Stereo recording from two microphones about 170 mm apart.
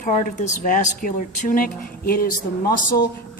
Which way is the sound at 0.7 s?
50° left (ahead or behind).